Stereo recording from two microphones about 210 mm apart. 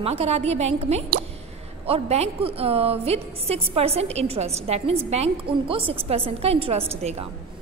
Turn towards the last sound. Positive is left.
turn(degrees=-30)  # may be behind; listen again after turning